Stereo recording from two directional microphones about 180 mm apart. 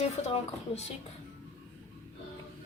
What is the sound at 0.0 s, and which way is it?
Speech, 35° left (ahead or behind).